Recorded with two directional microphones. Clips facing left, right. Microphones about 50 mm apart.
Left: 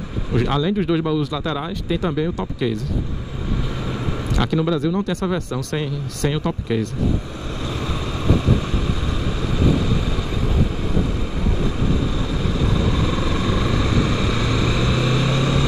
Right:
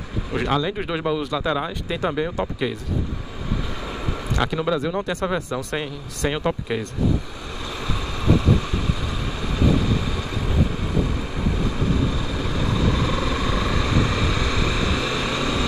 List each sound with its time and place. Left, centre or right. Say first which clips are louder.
0.3 s speech: left 3 dB; centre
4.4 s speech: left 2 dB; centre
9.2 s vehicle: left 2 dB; centre
12.2 s vehicle: left 3 dB; centre